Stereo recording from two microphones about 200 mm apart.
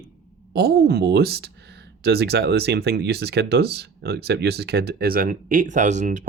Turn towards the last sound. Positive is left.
turn(degrees=-35)  # may be behind; listen again after turning